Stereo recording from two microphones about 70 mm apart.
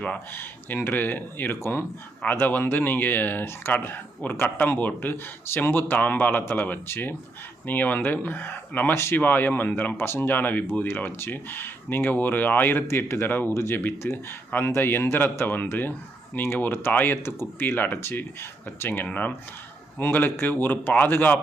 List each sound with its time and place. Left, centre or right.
0.0 s a man's voice: left